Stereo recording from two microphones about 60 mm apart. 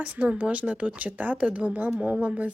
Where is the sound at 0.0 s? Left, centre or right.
Right.